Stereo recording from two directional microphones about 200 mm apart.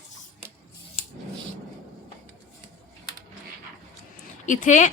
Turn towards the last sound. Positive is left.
turn(degrees=40)  # may be behind; listen again after turning